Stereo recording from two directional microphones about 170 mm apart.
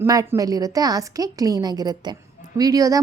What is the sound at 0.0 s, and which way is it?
A woman's voice, 15° right (ahead or behind).